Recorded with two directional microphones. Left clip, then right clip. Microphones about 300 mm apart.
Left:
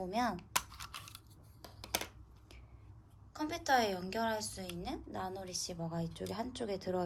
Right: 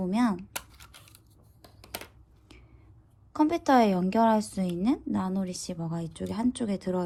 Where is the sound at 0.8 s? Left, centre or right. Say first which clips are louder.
Left 4 dB; centre.